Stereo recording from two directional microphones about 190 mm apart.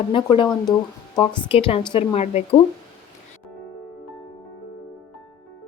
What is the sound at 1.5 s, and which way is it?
Speech, 30° left (ahead or behind).